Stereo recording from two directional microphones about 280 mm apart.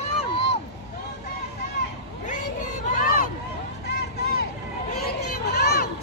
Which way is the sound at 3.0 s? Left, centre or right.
Left.